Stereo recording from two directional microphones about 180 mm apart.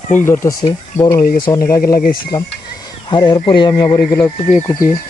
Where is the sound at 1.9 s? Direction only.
50° left (ahead or behind).